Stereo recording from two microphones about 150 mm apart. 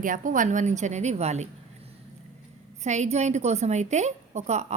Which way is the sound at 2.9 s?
50° right (ahead or behind).